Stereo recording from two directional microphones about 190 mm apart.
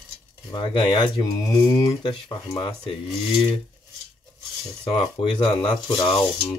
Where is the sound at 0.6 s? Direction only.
25° left (ahead or behind).